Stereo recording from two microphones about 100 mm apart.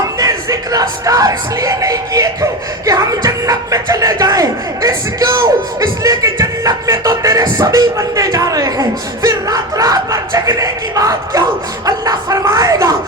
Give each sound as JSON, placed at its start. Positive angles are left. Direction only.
{"t": 0.2, "sound": "speech", "side_deg": -35}